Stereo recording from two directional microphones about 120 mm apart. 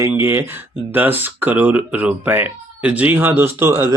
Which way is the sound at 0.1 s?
20° right (ahead or behind).